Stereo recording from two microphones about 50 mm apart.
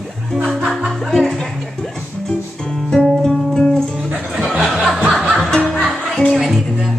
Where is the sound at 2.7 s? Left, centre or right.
Centre.